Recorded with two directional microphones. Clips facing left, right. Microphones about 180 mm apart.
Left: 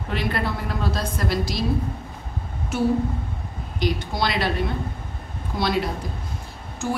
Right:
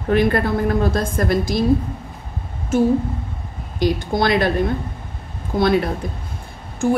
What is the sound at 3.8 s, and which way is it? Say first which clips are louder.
A woman's voice: right 6 dB; 50° right (ahead or behind).